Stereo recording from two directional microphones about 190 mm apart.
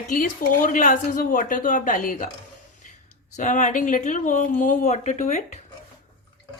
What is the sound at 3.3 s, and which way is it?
A woman's voice, 40° left (ahead or behind).